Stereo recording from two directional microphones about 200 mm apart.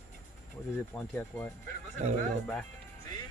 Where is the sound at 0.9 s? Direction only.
10° left (ahead or behind).